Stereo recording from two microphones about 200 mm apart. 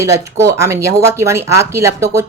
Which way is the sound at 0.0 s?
15° right (ahead or behind).